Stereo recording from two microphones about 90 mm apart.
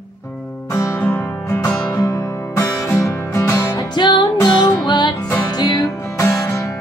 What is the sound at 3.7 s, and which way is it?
Music, 55° left (ahead or behind).